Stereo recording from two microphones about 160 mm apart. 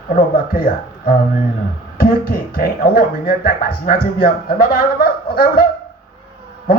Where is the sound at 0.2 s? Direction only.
70° left (ahead or behind).